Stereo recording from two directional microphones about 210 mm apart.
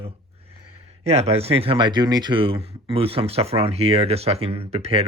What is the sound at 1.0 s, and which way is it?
Speech, 30° right (ahead or behind).